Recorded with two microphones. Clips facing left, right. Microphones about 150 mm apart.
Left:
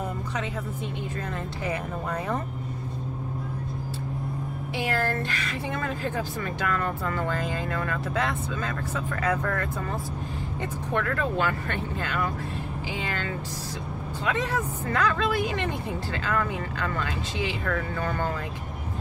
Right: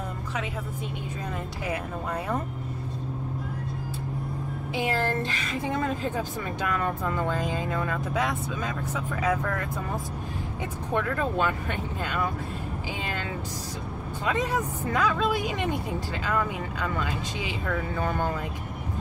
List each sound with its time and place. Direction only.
4.7 s speech: 20° right (ahead or behind)
10.9 s speech: 15° right (ahead or behind)
14.2 s speech: 15° right (ahead or behind)